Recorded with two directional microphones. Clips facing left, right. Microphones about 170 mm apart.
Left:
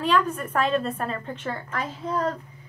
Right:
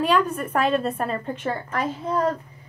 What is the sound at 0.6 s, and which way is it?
Speech, 10° right (ahead or behind).